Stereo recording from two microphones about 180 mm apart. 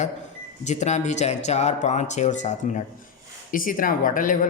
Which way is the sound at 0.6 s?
40° left (ahead or behind).